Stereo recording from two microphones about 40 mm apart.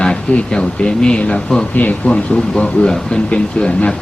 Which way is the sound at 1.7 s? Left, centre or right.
Left.